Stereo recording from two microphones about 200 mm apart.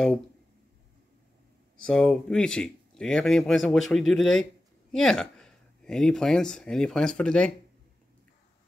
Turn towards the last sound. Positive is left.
turn(degrees=5)  # may be behind; listen again after turning